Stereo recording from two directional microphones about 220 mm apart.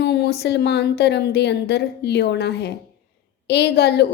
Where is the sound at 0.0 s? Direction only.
50° left (ahead or behind).